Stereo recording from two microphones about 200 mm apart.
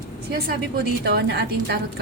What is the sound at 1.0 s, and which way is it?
Speech, 55° right (ahead or behind).